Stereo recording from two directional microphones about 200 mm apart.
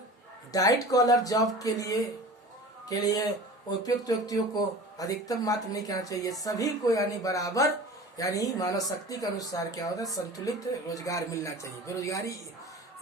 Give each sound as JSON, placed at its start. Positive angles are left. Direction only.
{"t": 0.5, "sound": "speech", "side_deg": 15}